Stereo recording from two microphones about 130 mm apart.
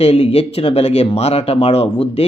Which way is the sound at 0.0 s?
50° left (ahead or behind).